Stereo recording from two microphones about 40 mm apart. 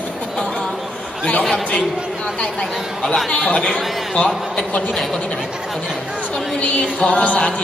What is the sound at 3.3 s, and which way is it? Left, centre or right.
Speech, left.